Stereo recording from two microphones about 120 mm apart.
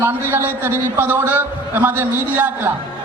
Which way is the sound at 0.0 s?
20° right (ahead or behind).